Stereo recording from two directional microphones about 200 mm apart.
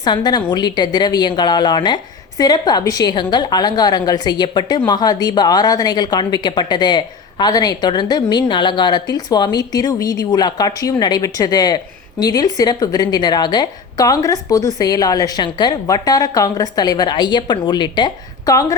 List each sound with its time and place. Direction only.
0.0 s a woman's voice: 20° left (ahead or behind)